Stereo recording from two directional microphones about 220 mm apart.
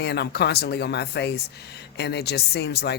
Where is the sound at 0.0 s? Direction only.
50° left (ahead or behind).